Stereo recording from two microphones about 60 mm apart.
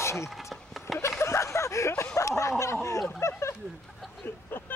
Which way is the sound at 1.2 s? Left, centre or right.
Left.